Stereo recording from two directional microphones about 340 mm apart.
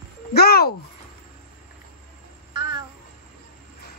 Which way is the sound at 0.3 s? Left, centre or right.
Left.